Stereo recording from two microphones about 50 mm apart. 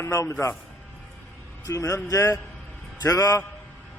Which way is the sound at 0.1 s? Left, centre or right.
Left.